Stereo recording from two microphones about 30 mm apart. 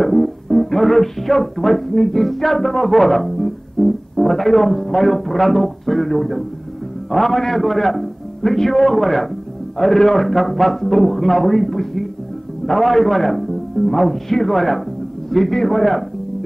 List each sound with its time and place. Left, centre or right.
0.0 s music: centre
7.1 s a man's voice: centre